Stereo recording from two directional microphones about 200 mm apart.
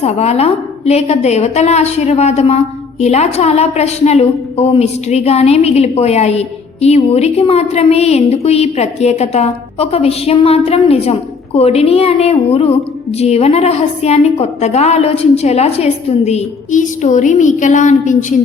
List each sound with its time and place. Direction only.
0.0 s a woman's voice: 30° left (ahead or behind)